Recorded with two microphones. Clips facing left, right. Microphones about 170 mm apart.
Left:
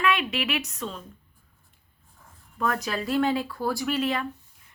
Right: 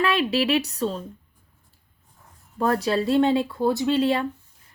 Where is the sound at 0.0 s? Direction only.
35° right (ahead or behind).